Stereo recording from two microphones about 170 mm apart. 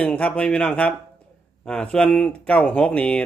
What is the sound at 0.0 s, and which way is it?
Speech, 10° left (ahead or behind).